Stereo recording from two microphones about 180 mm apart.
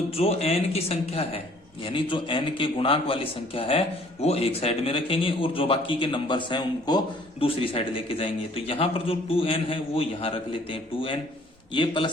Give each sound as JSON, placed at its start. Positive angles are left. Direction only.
{"t": 0.2, "sound": "a man's voice", "side_deg": 35}